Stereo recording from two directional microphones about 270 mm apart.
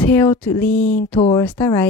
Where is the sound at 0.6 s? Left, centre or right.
Left.